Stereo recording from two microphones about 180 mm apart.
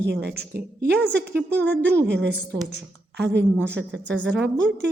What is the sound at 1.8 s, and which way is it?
A woman's voice, 75° right (ahead or behind).